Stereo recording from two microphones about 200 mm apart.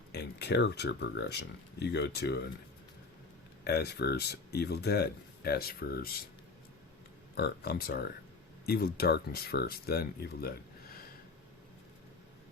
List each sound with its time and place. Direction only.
0.1 s speech: 55° left (ahead or behind)
3.6 s speech: 55° left (ahead or behind)
7.3 s speech: 50° left (ahead or behind)